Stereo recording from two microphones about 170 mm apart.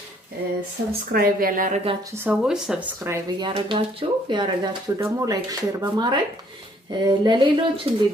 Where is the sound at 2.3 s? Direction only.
5° right (ahead or behind).